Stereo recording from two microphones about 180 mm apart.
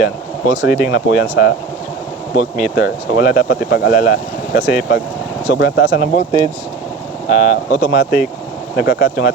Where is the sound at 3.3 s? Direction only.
45° left (ahead or behind).